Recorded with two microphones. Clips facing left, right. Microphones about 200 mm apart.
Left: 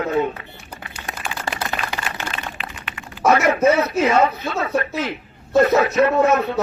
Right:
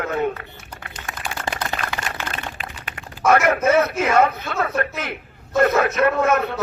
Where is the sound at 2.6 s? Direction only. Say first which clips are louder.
Left 1 dB; 45° right (ahead or behind).